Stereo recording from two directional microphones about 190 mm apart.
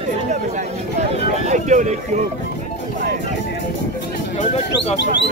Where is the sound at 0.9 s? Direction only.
35° right (ahead or behind).